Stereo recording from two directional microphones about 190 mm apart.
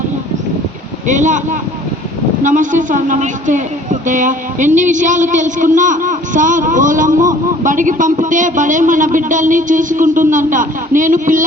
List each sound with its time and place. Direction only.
1.0 s speech: 40° right (ahead or behind)